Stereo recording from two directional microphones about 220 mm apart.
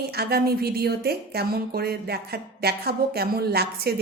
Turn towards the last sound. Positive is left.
turn(degrees=-45)  # may be behind; listen again after turning